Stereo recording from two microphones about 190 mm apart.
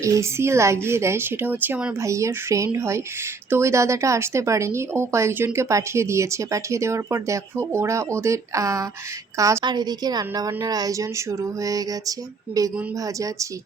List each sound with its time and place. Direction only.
0.0 s a woman's voice: 15° right (ahead or behind)